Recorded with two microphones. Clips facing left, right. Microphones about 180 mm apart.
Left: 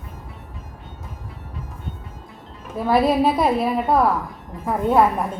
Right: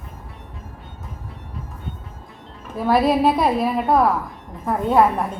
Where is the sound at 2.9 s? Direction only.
Centre (ahead or behind).